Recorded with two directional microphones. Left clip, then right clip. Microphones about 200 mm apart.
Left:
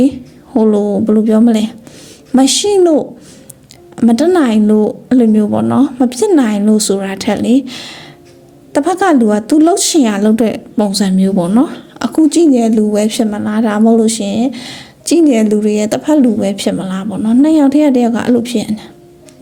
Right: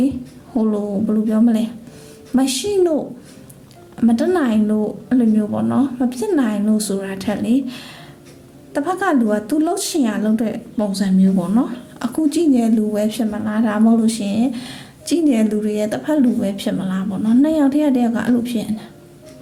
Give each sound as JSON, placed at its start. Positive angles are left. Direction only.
{"t": 0.0, "sound": "speech", "side_deg": 35}